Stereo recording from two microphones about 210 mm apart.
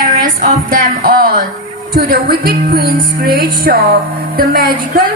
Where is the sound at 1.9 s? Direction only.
45° right (ahead or behind).